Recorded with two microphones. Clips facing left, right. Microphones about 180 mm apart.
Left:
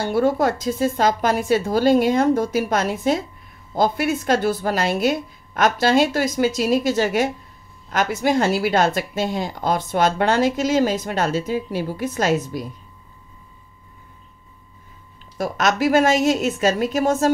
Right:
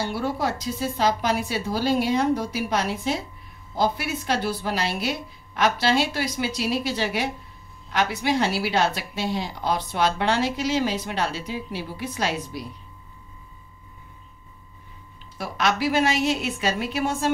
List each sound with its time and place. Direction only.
0.0 s a woman's voice: 50° left (ahead or behind)
15.3 s a woman's voice: 45° left (ahead or behind)